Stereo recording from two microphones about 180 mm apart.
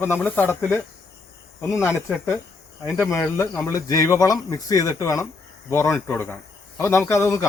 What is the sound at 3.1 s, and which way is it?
Speech, 15° left (ahead or behind).